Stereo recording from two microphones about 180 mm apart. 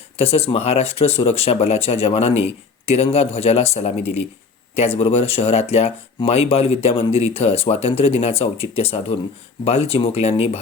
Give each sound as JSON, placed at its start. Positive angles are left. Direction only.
{"t": 0.2, "sound": "speech", "side_deg": 35}